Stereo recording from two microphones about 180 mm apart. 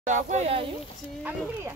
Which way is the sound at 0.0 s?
40° right (ahead or behind).